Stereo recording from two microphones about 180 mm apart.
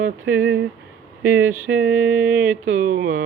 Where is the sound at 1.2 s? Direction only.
15° right (ahead or behind).